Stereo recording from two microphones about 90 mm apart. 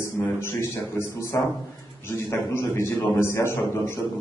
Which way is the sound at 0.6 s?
25° left (ahead or behind).